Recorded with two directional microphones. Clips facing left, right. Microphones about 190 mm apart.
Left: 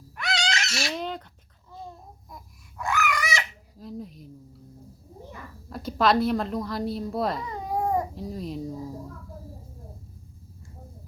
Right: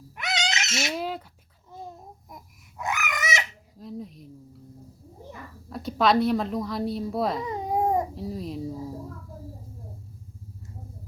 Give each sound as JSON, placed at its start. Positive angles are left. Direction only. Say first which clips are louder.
{"t": 0.2, "sound": "a sound", "louder": "left 1 dB", "side_deg": -20}
{"t": 0.9, "sound": "bird", "louder": "right 1 dB", "side_deg": -5}
{"t": 2.3, "sound": "babbling", "louder": "even", "side_deg": -20}
{"t": 3.8, "sound": "speech", "louder": "even", "side_deg": 0}
{"t": 5.6, "sound": "a woman's voice", "louder": "even", "side_deg": 0}
{"t": 7.4, "sound": "babbling", "louder": "right 3 dB", "side_deg": -20}
{"t": 8.1, "sound": "a woman's voice", "louder": "right 1 dB", "side_deg": 0}